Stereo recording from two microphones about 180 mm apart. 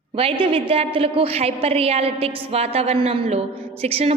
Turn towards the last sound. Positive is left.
turn(degrees=-35)  # may be behind; listen again after turning